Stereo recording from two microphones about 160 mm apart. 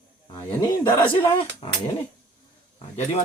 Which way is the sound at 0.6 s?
30° left (ahead or behind).